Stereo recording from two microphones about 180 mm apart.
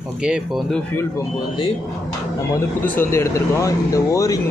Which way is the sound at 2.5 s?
10° left (ahead or behind).